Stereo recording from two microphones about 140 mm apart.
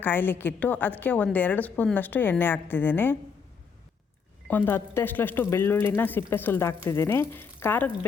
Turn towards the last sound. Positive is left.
turn(degrees=15)  # may be behind; listen again after turning